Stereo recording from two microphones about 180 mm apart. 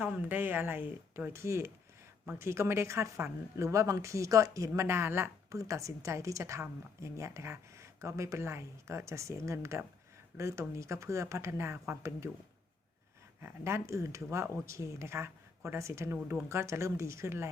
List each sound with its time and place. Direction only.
0.0 s speech: 10° right (ahead or behind)
13.4 s speech: 15° right (ahead or behind)